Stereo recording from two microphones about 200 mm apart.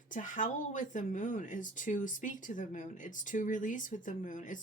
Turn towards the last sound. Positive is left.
turn(degrees=40)  # may be behind; listen again after turning